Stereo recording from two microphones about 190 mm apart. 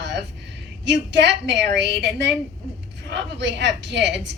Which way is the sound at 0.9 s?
65° right (ahead or behind).